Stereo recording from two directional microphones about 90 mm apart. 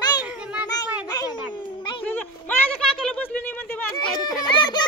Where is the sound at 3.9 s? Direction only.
55° left (ahead or behind).